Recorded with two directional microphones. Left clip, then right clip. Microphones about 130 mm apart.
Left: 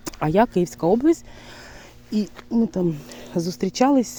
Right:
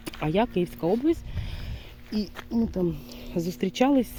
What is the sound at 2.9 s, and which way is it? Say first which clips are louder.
Speech: left 5 dB; 90° left.